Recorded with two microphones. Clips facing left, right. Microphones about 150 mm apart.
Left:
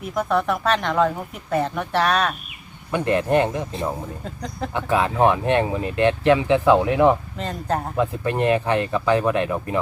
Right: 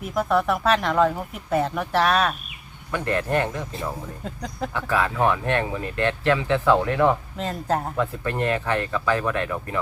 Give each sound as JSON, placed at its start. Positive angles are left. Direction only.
{"t": 0.0, "sound": "speech", "side_deg": 0}
{"t": 2.9, "sound": "speech", "side_deg": 20}
{"t": 4.2, "sound": "speech", "side_deg": 0}
{"t": 4.7, "sound": "speech", "side_deg": 20}
{"t": 7.3, "sound": "speech", "side_deg": 0}
{"t": 7.9, "sound": "speech", "side_deg": 20}